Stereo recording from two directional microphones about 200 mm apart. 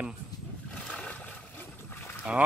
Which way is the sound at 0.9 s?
5° left (ahead or behind).